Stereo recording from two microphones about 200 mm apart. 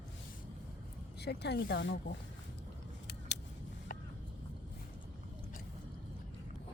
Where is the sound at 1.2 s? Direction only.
55° left (ahead or behind).